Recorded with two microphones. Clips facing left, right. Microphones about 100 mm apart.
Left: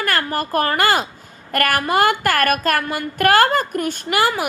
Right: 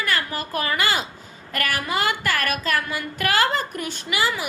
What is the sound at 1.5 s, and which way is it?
Speech, 55° left (ahead or behind).